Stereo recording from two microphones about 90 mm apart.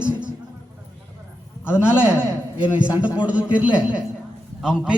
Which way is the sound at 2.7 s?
15° right (ahead or behind).